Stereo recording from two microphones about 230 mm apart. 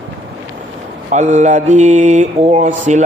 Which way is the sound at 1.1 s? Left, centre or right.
Right.